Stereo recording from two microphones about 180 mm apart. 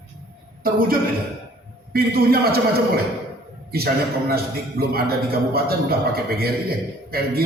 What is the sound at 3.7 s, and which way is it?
A man's voice, 60° right (ahead or behind).